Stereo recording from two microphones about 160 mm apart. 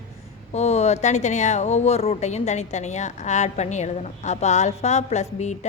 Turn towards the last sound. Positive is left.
turn(degrees=45)  # may be behind; listen again after turning